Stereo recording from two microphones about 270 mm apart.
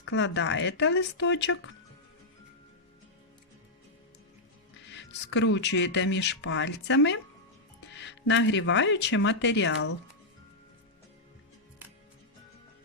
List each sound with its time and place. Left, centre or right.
0.0 s speech: left
4.9 s speech: left